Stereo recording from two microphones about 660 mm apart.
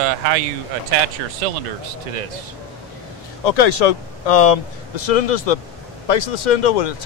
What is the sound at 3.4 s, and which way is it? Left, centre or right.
Speech, left.